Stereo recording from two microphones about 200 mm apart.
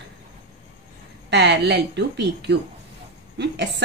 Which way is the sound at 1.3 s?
60° right (ahead or behind).